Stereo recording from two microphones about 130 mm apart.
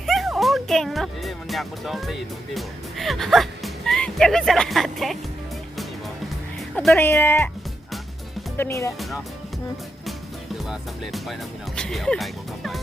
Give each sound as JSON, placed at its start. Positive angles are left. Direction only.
{"t": 0.0, "sound": "speech", "side_deg": 0}
{"t": 6.9, "sound": "speech", "side_deg": 15}
{"t": 8.5, "sound": "speech", "side_deg": 20}
{"t": 10.7, "sound": "speech", "side_deg": 0}